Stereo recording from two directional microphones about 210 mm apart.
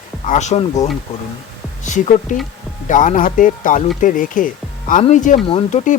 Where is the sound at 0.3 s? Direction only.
35° left (ahead or behind).